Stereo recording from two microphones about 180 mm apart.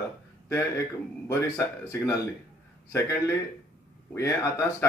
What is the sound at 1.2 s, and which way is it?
Speech, 15° left (ahead or behind).